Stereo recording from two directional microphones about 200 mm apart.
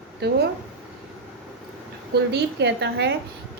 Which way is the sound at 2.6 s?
60° right (ahead or behind).